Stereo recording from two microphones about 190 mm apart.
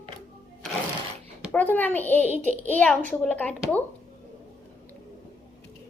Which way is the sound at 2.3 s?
40° right (ahead or behind).